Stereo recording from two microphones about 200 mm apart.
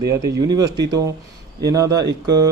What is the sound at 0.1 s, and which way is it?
A man's voice, 15° right (ahead or behind).